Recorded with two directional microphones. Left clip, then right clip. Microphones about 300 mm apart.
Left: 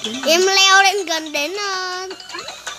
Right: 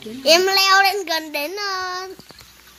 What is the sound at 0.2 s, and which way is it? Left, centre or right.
A child's voice, centre.